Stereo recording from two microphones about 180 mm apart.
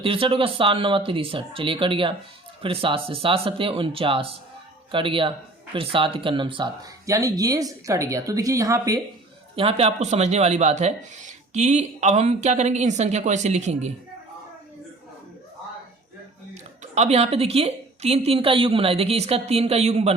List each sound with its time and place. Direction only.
0.0 s speech: 30° right (ahead or behind)
9.6 s speech: 35° right (ahead or behind)
16.8 s speech: 40° right (ahead or behind)